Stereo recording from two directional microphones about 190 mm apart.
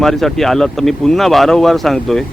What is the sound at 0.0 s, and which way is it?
Speech, centre (ahead or behind).